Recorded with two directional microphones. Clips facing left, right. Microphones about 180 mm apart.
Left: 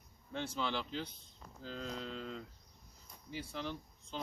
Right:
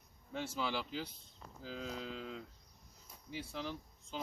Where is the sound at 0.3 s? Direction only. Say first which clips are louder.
Even; 5° right (ahead or behind).